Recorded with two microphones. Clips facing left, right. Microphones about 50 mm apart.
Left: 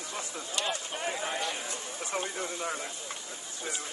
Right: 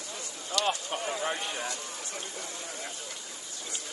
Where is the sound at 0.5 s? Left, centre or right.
Left.